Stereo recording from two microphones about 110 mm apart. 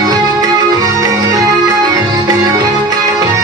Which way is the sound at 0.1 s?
35° right (ahead or behind).